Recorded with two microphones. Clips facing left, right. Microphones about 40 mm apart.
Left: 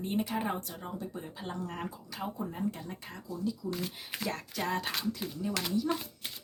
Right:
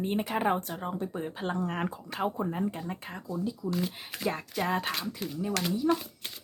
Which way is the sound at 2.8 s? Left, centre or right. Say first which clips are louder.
Right 5 dB; right.